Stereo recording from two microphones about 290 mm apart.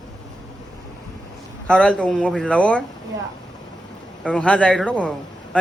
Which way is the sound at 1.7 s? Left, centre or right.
Centre.